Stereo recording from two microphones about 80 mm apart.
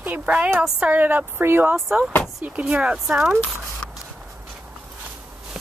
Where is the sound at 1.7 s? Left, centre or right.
Centre.